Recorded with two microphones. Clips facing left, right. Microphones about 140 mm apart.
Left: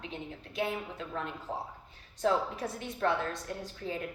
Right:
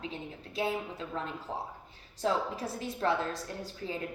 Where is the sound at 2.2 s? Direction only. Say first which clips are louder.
Left 1 dB; 30° right (ahead or behind).